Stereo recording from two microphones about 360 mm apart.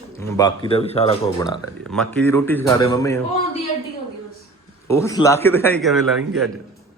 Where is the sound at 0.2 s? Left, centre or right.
Centre.